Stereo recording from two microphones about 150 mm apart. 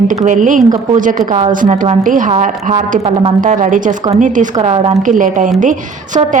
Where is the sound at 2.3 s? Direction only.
50° right (ahead or behind).